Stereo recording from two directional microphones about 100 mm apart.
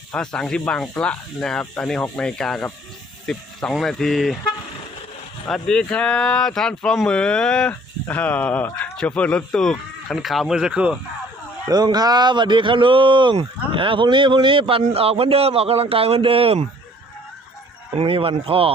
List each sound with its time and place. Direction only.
0.1 s speech: 10° left (ahead or behind)
5.5 s speech: 5° left (ahead or behind); by 11.0 s 10° right (ahead or behind)
11.7 s speech: 40° right (ahead or behind); by 16.6 s 70° right (ahead or behind)
18.0 s speech: 65° right (ahead or behind)